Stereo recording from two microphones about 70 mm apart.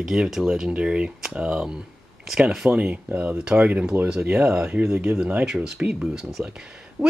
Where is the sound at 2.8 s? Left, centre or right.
Right.